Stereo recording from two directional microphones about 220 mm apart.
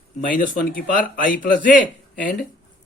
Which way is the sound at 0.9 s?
40° left (ahead or behind).